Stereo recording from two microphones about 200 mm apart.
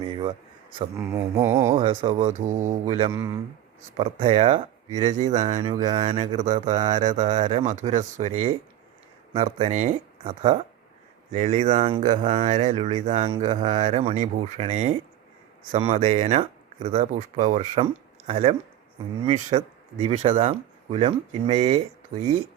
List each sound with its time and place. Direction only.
0.0 s a sound: 25° right (ahead or behind)
0.8 s mantra: 15° right (ahead or behind)
1.7 s speech: 35° right (ahead or behind)
3.1 s mantra: 15° right (ahead or behind)
3.9 s speech: 30° right (ahead or behind)
5.6 s a sound: 25° right (ahead or behind)
6.9 s speech: 35° right (ahead or behind)
18.3 s a sound: 30° right (ahead or behind)
19.2 s speech: 35° right (ahead or behind)